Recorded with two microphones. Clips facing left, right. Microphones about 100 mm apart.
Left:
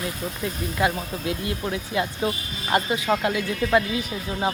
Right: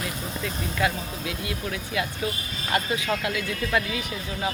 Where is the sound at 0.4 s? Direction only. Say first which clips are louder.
Left 3 dB; 25° left (ahead or behind).